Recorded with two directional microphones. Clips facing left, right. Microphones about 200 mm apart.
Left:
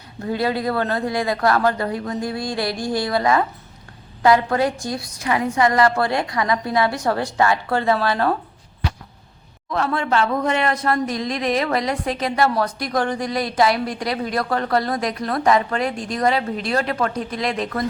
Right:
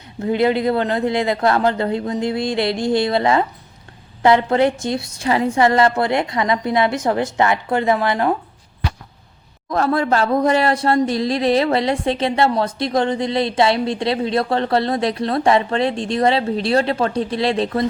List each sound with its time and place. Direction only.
0.2 s speech: 20° right (ahead or behind)
9.6 s speech: 40° right (ahead or behind)